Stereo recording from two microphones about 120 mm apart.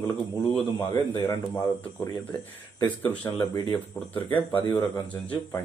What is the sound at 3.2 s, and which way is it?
Speech, 25° left (ahead or behind).